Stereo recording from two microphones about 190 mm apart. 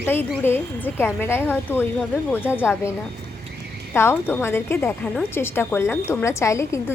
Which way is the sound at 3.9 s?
10° left (ahead or behind).